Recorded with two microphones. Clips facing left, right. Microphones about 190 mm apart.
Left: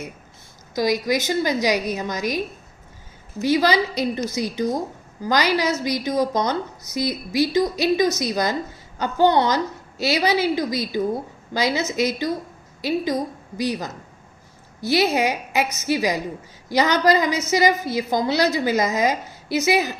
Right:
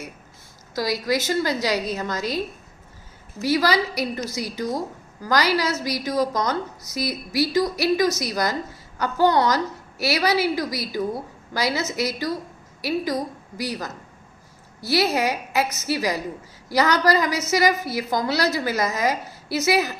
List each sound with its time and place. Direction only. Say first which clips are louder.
0.8 s speech: left 3 dB; 20° left (ahead or behind)
3.4 s a woman's voice: left 2 dB; 20° left (ahead or behind)